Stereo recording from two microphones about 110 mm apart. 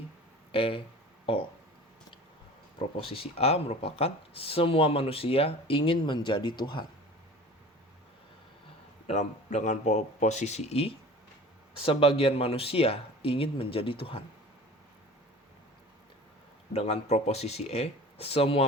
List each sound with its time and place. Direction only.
0.5 s speech: 55° left (ahead or behind)
2.7 s speech: 55° left (ahead or behind)
9.0 s speech: 90° left; by 10.9 s 70° left (ahead or behind)
11.8 s speech: 55° left (ahead or behind)
16.7 s speech: 70° left (ahead or behind)